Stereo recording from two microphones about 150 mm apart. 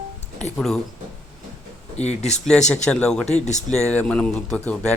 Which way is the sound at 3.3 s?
50° left (ahead or behind).